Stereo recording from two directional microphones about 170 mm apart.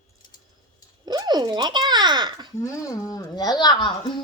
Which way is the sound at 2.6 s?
20° left (ahead or behind).